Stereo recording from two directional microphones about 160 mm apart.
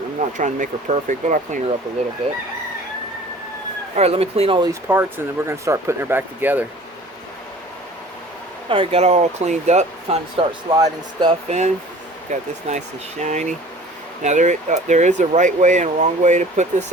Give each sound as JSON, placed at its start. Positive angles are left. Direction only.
{"t": 0.2, "sound": "speech", "side_deg": -50}
{"t": 3.9, "sound": "speech", "side_deg": -40}
{"t": 4.7, "sound": "speech", "side_deg": -15}
{"t": 8.7, "sound": "speech", "side_deg": -35}
{"t": 10.7, "sound": "speech", "side_deg": -25}
{"t": 11.4, "sound": "speech", "side_deg": -45}